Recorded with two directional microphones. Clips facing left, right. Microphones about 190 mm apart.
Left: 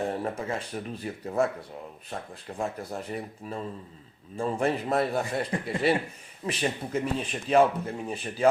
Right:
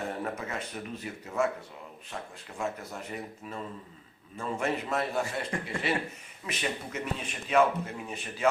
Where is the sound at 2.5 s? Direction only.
40° left (ahead or behind).